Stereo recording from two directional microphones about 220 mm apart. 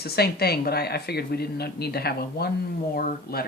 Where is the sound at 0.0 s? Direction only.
45° left (ahead or behind).